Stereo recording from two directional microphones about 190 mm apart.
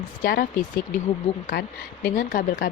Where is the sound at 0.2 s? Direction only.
50° left (ahead or behind).